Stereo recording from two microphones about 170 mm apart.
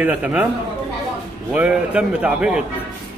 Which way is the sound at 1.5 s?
5° right (ahead or behind).